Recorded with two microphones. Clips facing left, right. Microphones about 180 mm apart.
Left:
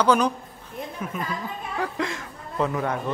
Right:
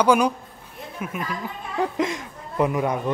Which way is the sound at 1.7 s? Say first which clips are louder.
Right 5 dB; 20° right (ahead or behind).